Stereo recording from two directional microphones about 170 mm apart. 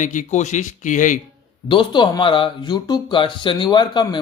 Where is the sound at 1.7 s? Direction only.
30° left (ahead or behind).